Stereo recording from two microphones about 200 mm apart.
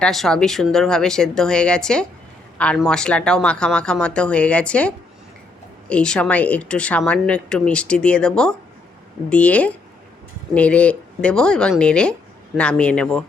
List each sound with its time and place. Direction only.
0.0 s speech: centre (ahead or behind)